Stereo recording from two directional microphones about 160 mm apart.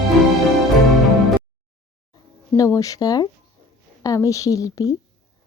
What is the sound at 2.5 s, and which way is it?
Speech, 20° left (ahead or behind).